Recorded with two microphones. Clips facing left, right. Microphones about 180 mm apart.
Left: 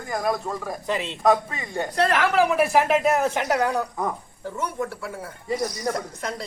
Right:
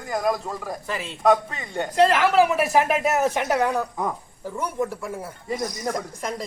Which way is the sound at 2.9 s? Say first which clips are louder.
Left 1 dB; 10° right (ahead or behind).